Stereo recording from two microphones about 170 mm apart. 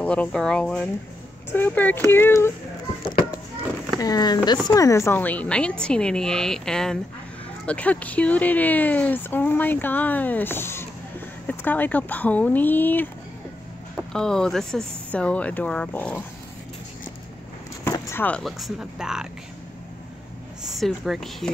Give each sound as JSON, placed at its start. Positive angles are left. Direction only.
{"t": 0.0, "sound": "a woman's voice", "side_deg": 5}
{"t": 4.0, "sound": "a woman's voice", "side_deg": 25}
{"t": 14.1, "sound": "speech", "side_deg": 5}
{"t": 17.8, "sound": "speech", "side_deg": 15}
{"t": 20.6, "sound": "a woman's voice", "side_deg": 0}